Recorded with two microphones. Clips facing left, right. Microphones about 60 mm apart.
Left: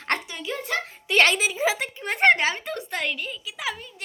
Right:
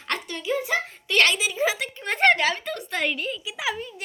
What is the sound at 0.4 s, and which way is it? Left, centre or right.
Speech, centre.